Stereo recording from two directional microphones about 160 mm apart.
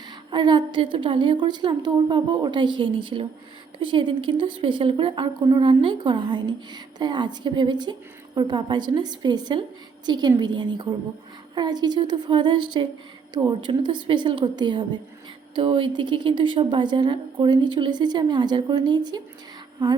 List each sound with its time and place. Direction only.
0.3 s a woman's voice: 30° right (ahead or behind)